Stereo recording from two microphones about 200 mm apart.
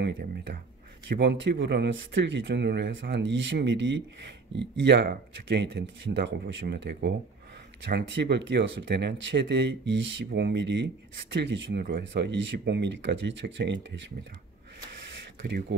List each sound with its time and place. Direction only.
1.0 s speech: 60° right (ahead or behind)